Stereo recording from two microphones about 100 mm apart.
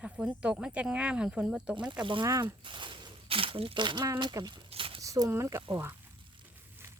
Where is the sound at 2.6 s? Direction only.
55° right (ahead or behind).